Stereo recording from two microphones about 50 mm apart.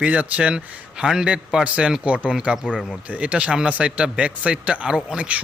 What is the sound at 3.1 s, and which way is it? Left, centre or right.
A man's voice, right.